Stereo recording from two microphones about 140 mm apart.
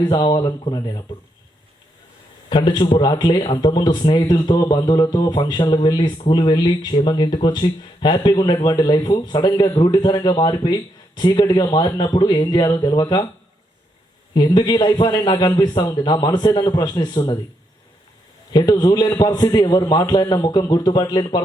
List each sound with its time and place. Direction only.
0.1 s speech: 30° left (ahead or behind)
2.5 s speech: 35° left (ahead or behind)
14.3 s speech: 35° left (ahead or behind)
18.5 s speech: 35° left (ahead or behind)